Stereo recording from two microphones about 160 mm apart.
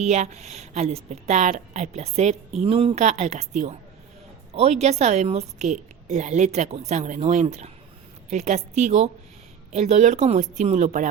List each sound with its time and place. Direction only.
0.0 s a woman's voice: 45° right (ahead or behind)